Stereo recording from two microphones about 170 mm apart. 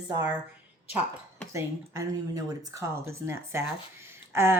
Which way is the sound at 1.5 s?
20° right (ahead or behind).